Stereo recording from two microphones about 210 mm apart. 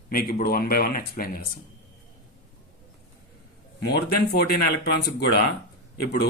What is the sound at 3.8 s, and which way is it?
Speech, 50° left (ahead or behind).